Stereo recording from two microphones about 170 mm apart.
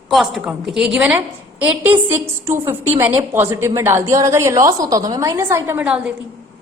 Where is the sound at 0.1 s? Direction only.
Centre (ahead or behind).